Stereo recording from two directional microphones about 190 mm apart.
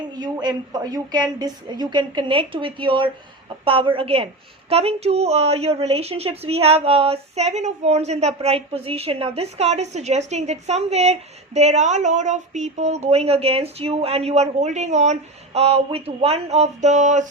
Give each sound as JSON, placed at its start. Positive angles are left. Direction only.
{"t": 0.2, "sound": "a woman's voice", "side_deg": -20}